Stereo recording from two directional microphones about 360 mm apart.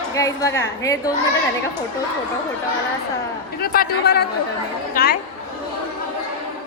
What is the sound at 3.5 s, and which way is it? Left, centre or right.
A man's voice, left.